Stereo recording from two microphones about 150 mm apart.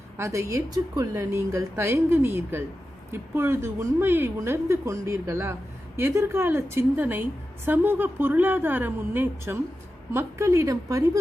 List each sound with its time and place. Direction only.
0.2 s a woman's voice: 20° right (ahead or behind)